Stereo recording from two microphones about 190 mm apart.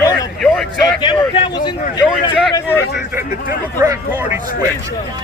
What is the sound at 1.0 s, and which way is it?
Vehicle, 25° left (ahead or behind).